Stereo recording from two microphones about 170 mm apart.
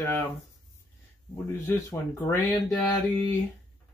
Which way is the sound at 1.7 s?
15° left (ahead or behind).